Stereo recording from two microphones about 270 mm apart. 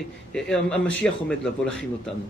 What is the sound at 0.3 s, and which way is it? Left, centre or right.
Speech, centre.